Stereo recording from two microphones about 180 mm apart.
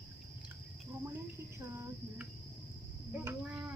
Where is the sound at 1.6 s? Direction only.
15° right (ahead or behind).